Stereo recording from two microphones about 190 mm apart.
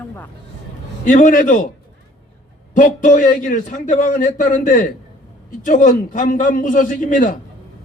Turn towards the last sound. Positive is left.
turn(degrees=45)  # may be behind; listen again after turning